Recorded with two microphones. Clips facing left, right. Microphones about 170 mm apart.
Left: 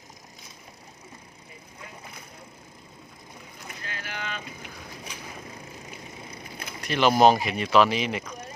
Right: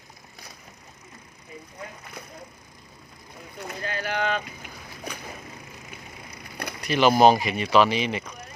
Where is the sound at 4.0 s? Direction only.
60° right (ahead or behind).